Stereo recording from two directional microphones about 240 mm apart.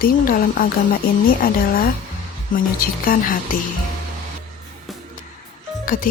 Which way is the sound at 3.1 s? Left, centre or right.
Left.